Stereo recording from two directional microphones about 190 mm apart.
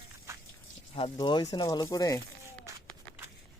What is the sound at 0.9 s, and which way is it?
Speech, 25° left (ahead or behind).